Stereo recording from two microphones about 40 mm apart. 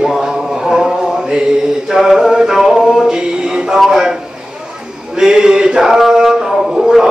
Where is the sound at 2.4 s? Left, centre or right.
Centre.